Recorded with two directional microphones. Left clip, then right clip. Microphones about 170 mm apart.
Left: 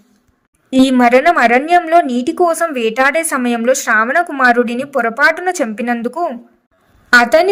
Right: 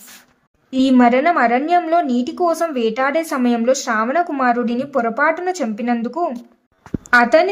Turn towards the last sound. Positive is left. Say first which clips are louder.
# left 3 dB
turn(degrees=30)  # may be behind; listen again after turning